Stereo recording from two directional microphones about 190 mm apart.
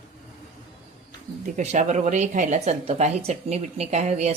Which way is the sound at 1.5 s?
40° right (ahead or behind).